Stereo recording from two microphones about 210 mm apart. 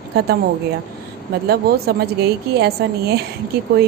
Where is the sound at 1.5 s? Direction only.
50° right (ahead or behind).